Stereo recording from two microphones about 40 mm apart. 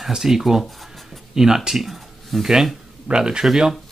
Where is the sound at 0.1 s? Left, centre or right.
Centre.